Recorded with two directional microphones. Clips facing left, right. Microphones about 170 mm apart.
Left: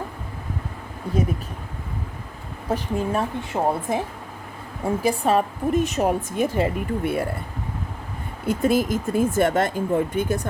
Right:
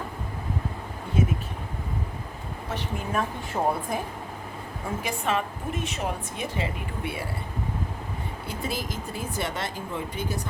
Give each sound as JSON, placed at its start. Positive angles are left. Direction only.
{"t": 1.1, "sound": "speech", "side_deg": 40}
{"t": 2.6, "sound": "a woman's voice", "side_deg": 30}
{"t": 5.0, "sound": "a woman's voice", "side_deg": 40}
{"t": 8.4, "sound": "a woman's voice", "side_deg": 50}